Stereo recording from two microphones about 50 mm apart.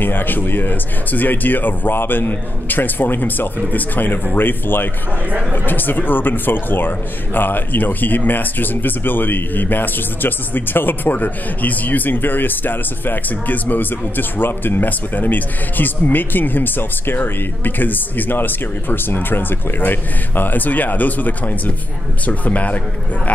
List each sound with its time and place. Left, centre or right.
0.0 s speech: left